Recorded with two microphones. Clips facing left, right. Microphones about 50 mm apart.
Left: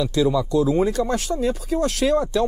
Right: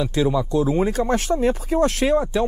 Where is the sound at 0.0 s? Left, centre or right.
Right.